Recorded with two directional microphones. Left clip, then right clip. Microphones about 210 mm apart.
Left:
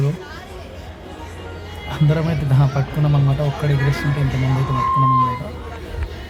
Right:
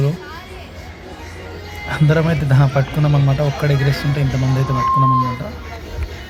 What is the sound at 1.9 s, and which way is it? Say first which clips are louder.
A man's voice: right 5 dB; 15° right (ahead or behind).